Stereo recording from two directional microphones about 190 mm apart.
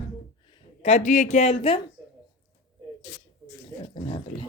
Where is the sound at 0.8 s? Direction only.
35° left (ahead or behind).